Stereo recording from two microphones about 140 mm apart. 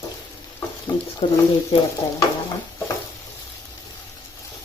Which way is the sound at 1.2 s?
40° left (ahead or behind).